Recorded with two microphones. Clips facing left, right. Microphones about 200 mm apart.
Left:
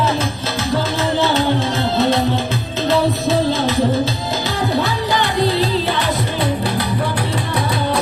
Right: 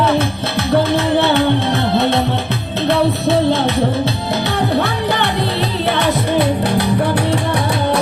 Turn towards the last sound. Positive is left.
turn(degrees=-65)  # may be behind; listen again after turning